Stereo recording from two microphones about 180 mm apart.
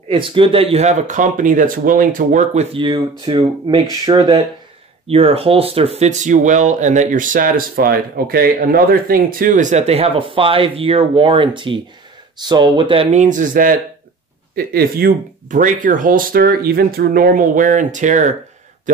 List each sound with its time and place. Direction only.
0.1 s speech: 30° right (ahead or behind)